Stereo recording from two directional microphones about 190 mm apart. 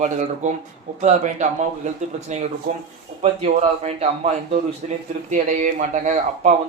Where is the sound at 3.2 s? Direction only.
35° right (ahead or behind).